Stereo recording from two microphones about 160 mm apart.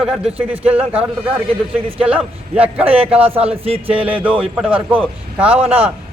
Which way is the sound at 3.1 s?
35° right (ahead or behind).